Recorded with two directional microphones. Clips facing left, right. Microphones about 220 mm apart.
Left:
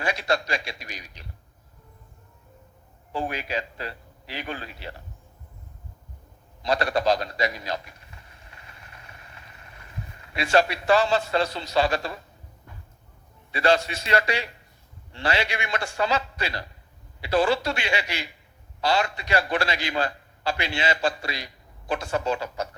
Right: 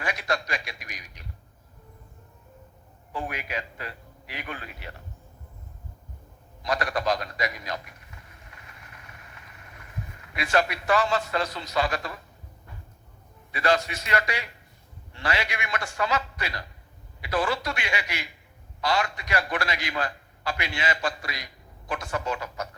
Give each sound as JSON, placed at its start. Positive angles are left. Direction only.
{"t": 0.0, "sound": "a sound", "side_deg": 30}
{"t": 3.1, "sound": "a man's voice", "side_deg": 30}
{"t": 6.6, "sound": "a man's voice", "side_deg": 30}
{"t": 8.4, "sound": "vehicle", "side_deg": 30}
{"t": 13.5, "sound": "a man's voice", "side_deg": 30}